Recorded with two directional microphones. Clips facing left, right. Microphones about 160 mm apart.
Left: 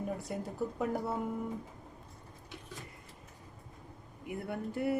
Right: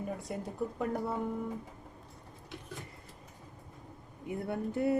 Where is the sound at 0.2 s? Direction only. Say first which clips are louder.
Even; centre (ahead or behind).